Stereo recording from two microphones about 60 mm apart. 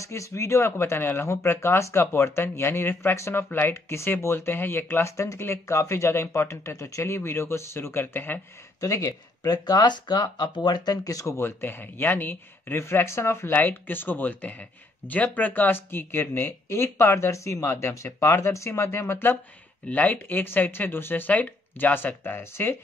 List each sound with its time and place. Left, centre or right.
0.0 s speech: left
3.4 s speech: left
3.7 s speech: left
5.0 s speech: left
7.1 s speech: left
8.8 s speech: left
11.3 s speech: left
13.5 s speech: left
16.4 s speech: left
19.9 s speech: left